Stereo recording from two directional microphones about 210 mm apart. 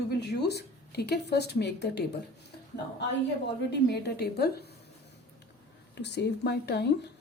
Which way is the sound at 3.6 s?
55° left (ahead or behind).